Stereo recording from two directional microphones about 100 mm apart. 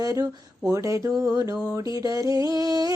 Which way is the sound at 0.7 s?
30° right (ahead or behind).